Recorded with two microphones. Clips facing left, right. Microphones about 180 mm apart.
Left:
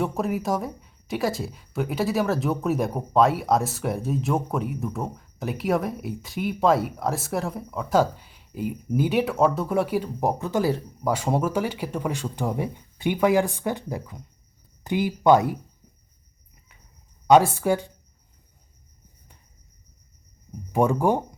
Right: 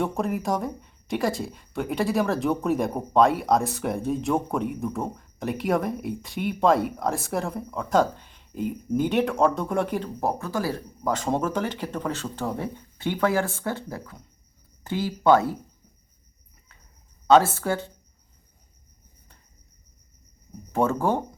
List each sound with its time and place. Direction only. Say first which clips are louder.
0.0 s speech: left 1 dB; 5° left (ahead or behind)
17.2 s speech: left 1 dB; 15° left (ahead or behind)
20.7 s speech: left 2 dB; 15° left (ahead or behind)